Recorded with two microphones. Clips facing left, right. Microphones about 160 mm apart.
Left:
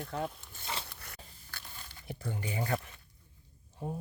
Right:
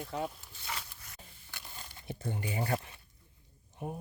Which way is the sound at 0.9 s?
65° left (ahead or behind).